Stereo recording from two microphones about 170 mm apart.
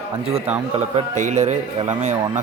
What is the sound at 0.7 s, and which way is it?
A man's voice, 40° right (ahead or behind).